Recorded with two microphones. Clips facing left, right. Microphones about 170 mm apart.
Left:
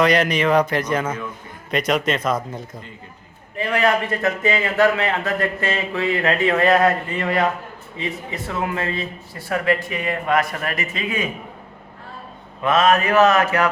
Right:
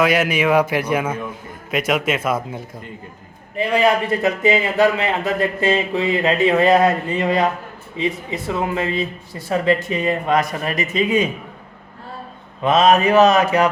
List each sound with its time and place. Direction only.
0.0 s speech: 5° right (ahead or behind)
3.6 s speech: 15° right (ahead or behind)
12.6 s speech: 20° right (ahead or behind)